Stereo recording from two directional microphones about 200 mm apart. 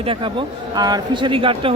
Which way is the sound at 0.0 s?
25° right (ahead or behind).